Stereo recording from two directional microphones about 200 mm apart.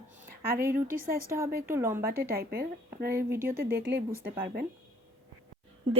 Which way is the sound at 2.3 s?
50° right (ahead or behind).